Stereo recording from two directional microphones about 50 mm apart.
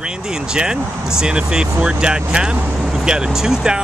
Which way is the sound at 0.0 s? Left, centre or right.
Centre.